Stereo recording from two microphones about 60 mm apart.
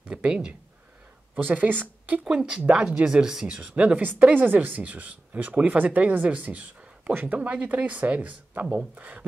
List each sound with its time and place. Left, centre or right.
0.1 s a sound: right
1.4 s speech: right
2.2 s speech: centre